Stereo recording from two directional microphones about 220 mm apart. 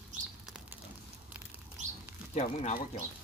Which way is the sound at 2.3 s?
30° left (ahead or behind).